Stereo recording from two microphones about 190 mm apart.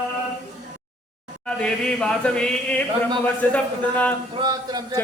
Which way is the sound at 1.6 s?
5° left (ahead or behind).